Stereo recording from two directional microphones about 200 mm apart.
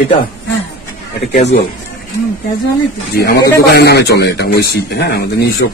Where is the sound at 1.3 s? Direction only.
35° left (ahead or behind).